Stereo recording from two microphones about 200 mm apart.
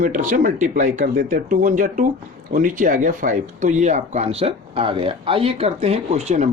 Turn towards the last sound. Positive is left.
turn(degrees=-35)  # may be behind; listen again after turning